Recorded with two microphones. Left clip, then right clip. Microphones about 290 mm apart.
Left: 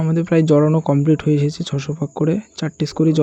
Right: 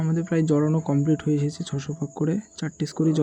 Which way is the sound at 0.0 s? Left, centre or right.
Centre.